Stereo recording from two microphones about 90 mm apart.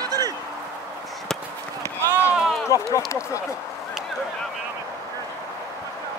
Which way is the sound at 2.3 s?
Centre (ahead or behind).